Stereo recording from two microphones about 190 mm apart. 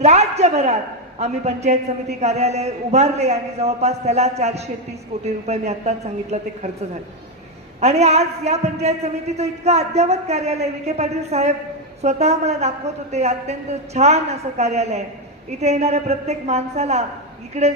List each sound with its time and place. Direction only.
0.0 s a sound: 35° right (ahead or behind)
1.2 s a man's voice: 35° right (ahead or behind)
7.8 s a man's voice: 35° right (ahead or behind)